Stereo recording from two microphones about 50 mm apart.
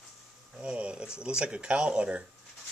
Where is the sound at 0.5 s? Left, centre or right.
Right.